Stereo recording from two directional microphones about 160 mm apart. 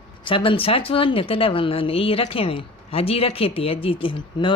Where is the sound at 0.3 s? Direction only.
35° left (ahead or behind).